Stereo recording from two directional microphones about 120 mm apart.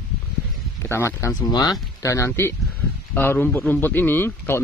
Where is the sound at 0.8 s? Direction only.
20° left (ahead or behind).